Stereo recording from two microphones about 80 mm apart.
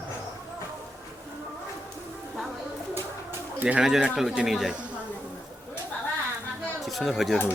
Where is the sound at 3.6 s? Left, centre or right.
Centre.